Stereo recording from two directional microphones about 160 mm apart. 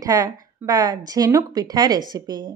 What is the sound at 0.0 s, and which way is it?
Speech, 25° right (ahead or behind).